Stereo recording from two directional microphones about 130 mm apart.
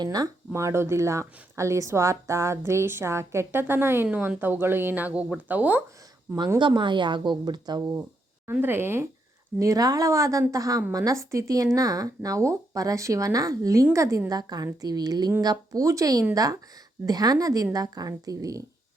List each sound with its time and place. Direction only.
0.0 s speech: 30° right (ahead or behind); by 5.8 s 15° right (ahead or behind)
6.6 s a woman's voice: 35° right (ahead or behind)
8.4 s a woman's voice: 15° right (ahead or behind)